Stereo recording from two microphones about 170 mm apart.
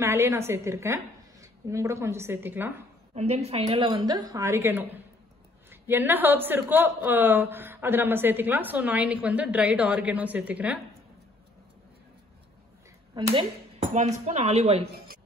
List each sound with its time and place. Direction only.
0.0 s speech: 15° right (ahead or behind)
3.2 s a woman's voice: 40° right (ahead or behind); by 10.8 s 10° right (ahead or behind)
13.1 s a woman's voice: 30° right (ahead or behind)
14.2 s a woman's voice: 40° right (ahead or behind)